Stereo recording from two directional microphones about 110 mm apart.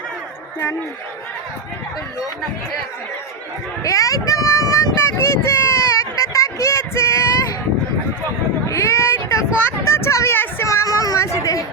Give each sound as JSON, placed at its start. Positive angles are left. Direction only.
{"t": 3.8, "sound": "speech", "side_deg": 30}
{"t": 8.6, "sound": "speech", "side_deg": 25}
{"t": 10.7, "sound": "a sound", "side_deg": 30}